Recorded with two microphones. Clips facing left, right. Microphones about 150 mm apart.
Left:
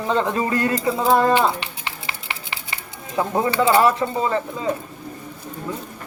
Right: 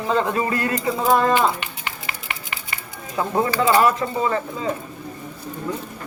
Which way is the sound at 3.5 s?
25° left (ahead or behind).